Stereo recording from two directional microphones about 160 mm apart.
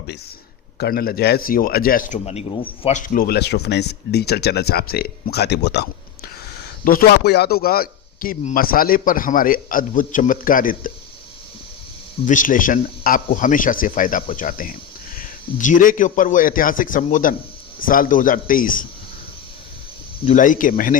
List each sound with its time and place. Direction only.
0.8 s a man's voice: 75° left (ahead or behind)
2.1 s speech: 40° left (ahead or behind)
2.9 s speech: 55° left (ahead or behind); by 6.3 s 90° left
6.8 s a man's voice: 75° left (ahead or behind); by 10.9 s 60° left (ahead or behind)
12.2 s a man's voice: 55° left (ahead or behind)
20.2 s a man's voice: 55° left (ahead or behind)